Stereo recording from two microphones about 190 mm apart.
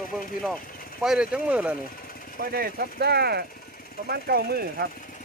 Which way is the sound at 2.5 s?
50° right (ahead or behind).